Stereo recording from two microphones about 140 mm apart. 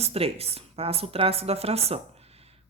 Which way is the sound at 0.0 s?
45° right (ahead or behind).